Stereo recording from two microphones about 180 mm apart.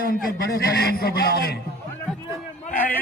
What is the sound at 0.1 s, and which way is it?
A man's voice, 60° left (ahead or behind).